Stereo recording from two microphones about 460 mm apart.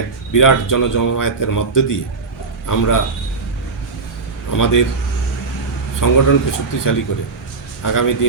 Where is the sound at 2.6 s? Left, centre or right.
Left.